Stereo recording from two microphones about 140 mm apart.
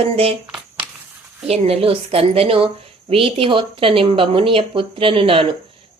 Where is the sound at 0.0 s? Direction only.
45° right (ahead or behind).